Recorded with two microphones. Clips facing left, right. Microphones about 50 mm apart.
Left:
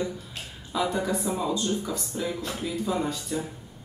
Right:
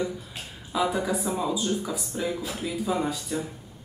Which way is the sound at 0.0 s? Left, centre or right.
Centre.